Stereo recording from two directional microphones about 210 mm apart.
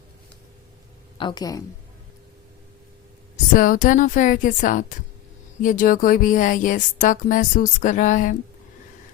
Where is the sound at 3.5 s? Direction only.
40° left (ahead or behind).